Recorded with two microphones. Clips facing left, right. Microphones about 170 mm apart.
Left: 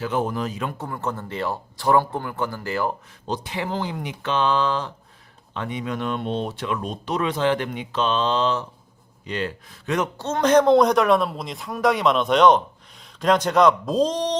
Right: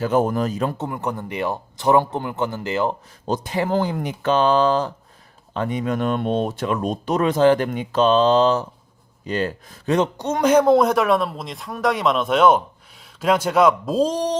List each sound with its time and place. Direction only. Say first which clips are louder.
0.0 s speech: right 5 dB; 45° right (ahead or behind)
0.8 s speech: right 3 dB; 15° right (ahead or behind)
3.2 s speech: right 5 dB; 45° right (ahead or behind)
10.2 s speech: left 2 dB; 10° right (ahead or behind)